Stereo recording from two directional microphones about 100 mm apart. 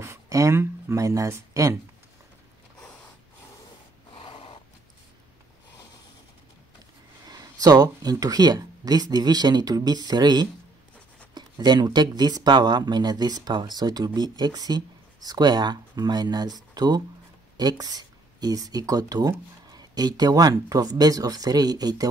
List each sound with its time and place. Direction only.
0.0 s speech: 30° right (ahead or behind)
4.2 s snort: 55° left (ahead or behind)
7.2 s speech: 40° right (ahead or behind)